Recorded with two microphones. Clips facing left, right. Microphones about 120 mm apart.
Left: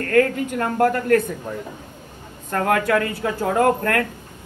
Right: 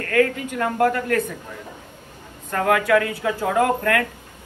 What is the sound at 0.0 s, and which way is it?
A woman's voice, 40° left (ahead or behind).